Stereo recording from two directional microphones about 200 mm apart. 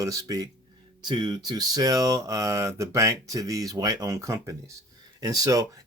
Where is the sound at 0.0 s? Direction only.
15° right (ahead or behind).